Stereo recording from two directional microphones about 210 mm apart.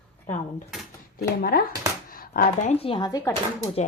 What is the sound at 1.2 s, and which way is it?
Speech, 45° left (ahead or behind).